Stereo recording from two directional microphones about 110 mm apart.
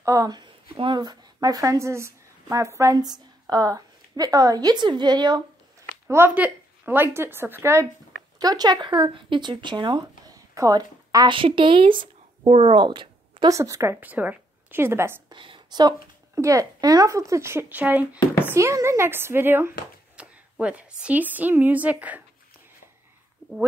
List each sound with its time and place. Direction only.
0.0 s speech: 30° right (ahead or behind)
0.7 s a woman's voice: 50° right (ahead or behind)
6.0 s speech: 20° right (ahead or behind)
8.4 s speech: 35° right (ahead or behind)
11.3 s a woman's voice: 50° right (ahead or behind)
12.4 s speech: 60° right (ahead or behind)
13.5 s speech: 30° right (ahead or behind)
15.2 s a woman's voice: 50° right (ahead or behind)
16.3 s speech: 30° right (ahead or behind)
18.5 s a woman's voice: 25° right (ahead or behind)